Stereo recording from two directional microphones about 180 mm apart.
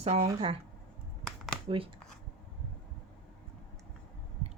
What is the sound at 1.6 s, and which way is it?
Speech, 30° right (ahead or behind).